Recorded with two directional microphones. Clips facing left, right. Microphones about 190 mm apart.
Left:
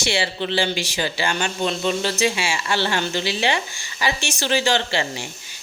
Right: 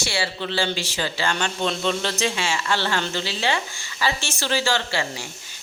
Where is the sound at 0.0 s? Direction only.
20° left (ahead or behind).